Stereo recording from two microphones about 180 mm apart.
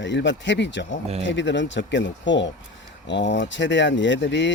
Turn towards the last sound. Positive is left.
turn(degrees=80)